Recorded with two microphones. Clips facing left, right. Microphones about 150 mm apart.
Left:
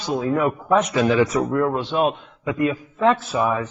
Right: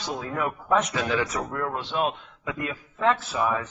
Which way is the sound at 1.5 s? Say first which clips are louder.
Left 9 dB; 25° left (ahead or behind).